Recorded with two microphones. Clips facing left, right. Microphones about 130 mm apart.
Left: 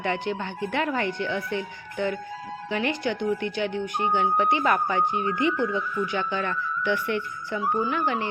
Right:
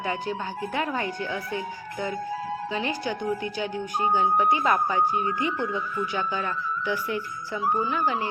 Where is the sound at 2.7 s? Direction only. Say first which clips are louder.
Left 5 dB; 65° left (ahead or behind).